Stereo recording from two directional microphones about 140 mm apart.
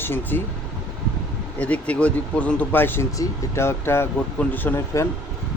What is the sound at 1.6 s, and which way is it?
Speech, 10° left (ahead or behind).